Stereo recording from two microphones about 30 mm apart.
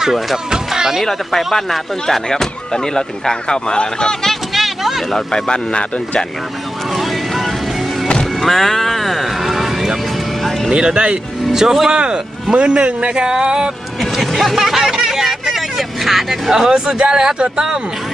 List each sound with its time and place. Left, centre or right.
0.8 s speech: centre
1.5 s speech: centre; by 4.2 s left
4.5 s vehicle: centre
5.1 s speech: left
6.9 s vehicle: centre
8.0 s music: left
8.4 s a sound: centre
10.7 s speech: right
11.5 s speech: centre
11.9 s speech: right
14.2 s speech: centre
15.0 s vehicle: centre